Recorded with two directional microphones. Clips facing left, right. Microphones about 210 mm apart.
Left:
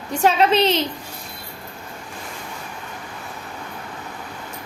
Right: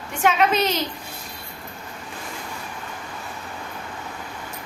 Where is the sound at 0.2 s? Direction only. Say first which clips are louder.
Left 3 dB; 35° left (ahead or behind).